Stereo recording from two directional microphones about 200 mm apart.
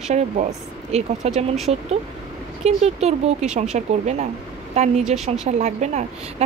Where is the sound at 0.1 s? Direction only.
35° right (ahead or behind).